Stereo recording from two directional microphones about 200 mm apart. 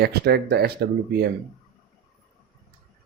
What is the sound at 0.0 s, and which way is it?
Speech, 55° right (ahead or behind).